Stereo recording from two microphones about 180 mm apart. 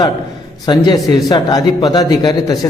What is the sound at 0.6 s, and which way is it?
Speech, 20° left (ahead or behind).